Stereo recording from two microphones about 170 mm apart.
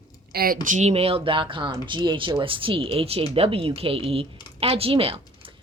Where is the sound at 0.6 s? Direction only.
45° right (ahead or behind).